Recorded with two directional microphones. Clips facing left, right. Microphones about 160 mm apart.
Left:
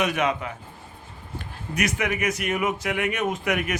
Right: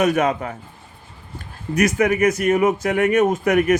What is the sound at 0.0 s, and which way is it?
Speech, 45° right (ahead or behind).